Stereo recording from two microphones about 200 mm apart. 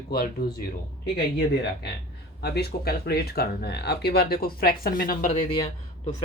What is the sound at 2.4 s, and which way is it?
Speech, 55° left (ahead or behind).